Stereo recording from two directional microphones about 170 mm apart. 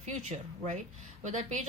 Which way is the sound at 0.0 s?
40° right (ahead or behind).